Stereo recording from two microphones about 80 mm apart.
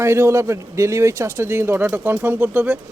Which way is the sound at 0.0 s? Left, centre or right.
Right.